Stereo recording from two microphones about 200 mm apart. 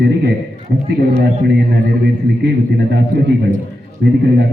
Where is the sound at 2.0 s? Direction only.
60° right (ahead or behind).